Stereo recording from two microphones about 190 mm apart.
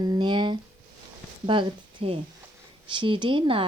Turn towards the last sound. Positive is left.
turn(degrees=-25)  # may be behind; listen again after turning